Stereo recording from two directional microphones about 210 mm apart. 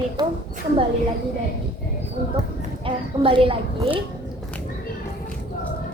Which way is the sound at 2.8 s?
25° right (ahead or behind).